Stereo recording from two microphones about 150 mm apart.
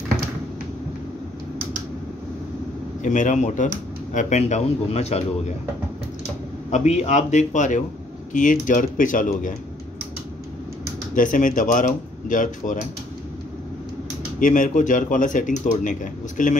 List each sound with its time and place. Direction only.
3.0 s speech: 55° left (ahead or behind)
6.7 s speech: 50° left (ahead or behind)
11.1 s speech: 60° left (ahead or behind)
14.4 s speech: 60° left (ahead or behind)